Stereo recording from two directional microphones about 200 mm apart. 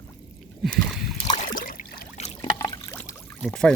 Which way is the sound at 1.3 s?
40° left (ahead or behind).